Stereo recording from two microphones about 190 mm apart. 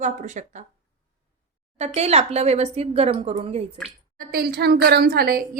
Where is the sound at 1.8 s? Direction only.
35° right (ahead or behind).